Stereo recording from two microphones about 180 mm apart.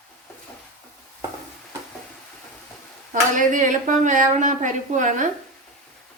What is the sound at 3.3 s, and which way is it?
A woman's voice, 45° right (ahead or behind).